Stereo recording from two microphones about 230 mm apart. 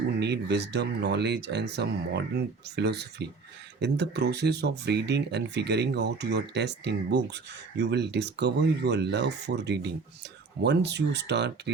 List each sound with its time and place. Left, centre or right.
0.2 s speech: right